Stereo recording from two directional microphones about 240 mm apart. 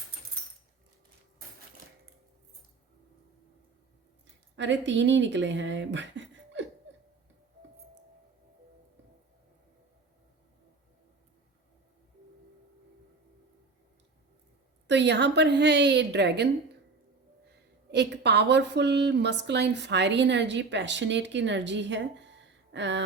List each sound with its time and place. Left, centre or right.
4.5 s speech: right
14.8 s a woman's voice: right
17.9 s a woman's voice: right